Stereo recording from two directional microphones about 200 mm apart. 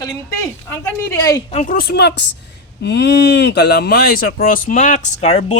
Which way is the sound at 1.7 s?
55° left (ahead or behind).